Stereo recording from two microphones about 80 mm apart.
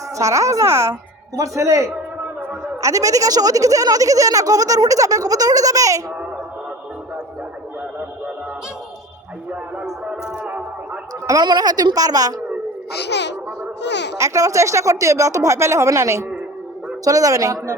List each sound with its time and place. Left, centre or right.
0.2 s speech: right
10.1 s a sound: centre
11.3 s a woman's voice: right
14.2 s speech: right